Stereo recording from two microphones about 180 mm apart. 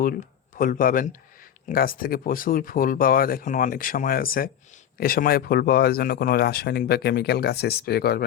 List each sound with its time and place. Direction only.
0.0 s speech: 50° left (ahead or behind)